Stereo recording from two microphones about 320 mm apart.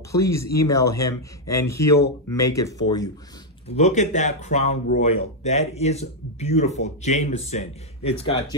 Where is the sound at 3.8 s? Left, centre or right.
Left.